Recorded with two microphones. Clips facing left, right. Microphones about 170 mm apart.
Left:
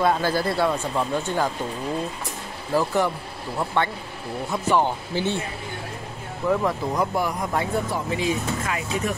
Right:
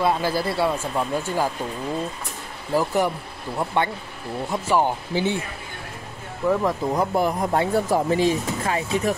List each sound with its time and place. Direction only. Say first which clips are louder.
0.0 s speech: even; 5° right (ahead or behind)
2.7 s speech: right 1 dB; 15° right (ahead or behind)
6.4 s speech: right 1 dB; 5° right (ahead or behind)
6.9 s speech: right 3 dB; 25° right (ahead or behind)